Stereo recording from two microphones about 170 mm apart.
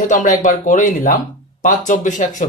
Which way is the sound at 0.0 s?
50° left (ahead or behind).